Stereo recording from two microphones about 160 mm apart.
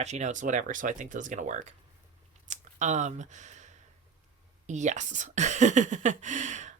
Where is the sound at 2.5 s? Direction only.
50° right (ahead or behind).